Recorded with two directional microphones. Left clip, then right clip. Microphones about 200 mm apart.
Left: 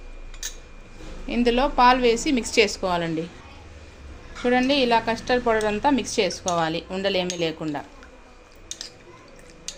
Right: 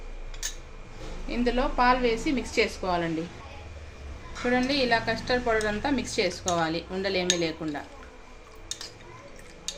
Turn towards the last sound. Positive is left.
turn(degrees=40)  # may be behind; listen again after turning